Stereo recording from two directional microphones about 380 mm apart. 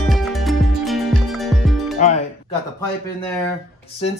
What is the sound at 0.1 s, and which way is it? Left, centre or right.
Music, centre.